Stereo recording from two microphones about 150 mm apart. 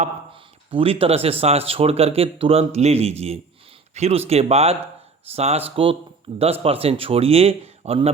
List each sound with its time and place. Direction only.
0.7 s speech: 40° right (ahead or behind)